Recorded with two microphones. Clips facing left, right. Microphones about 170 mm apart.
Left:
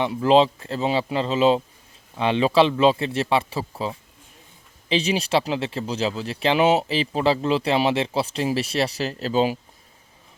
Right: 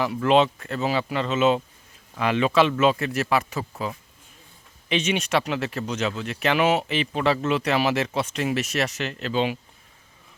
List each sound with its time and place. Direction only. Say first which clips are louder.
0.0 s a man's voice: left 2 dB; 30° left (ahead or behind)